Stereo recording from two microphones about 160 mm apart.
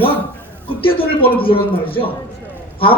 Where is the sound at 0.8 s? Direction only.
35° left (ahead or behind).